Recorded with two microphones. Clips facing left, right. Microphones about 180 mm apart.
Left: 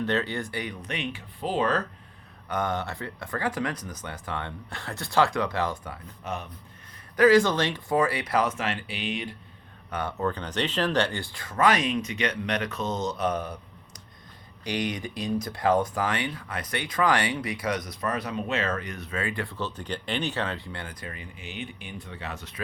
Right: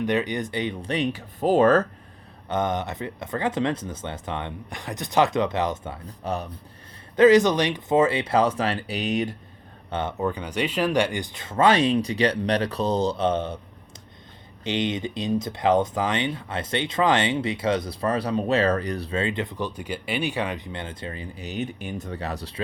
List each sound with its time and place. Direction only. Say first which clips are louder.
0.0 s speech: right 3 dB; 15° right (ahead or behind); by 1.8 s 45° right (ahead or behind)
2.5 s speech: right 3 dB; 20° right (ahead or behind)
7.2 s speech: right 3 dB; 20° right (ahead or behind); by 9.3 s 45° right (ahead or behind)
9.9 s speech: right 3 dB; 20° right (ahead or behind)
14.6 s speech: right 4 dB; 25° right (ahead or behind)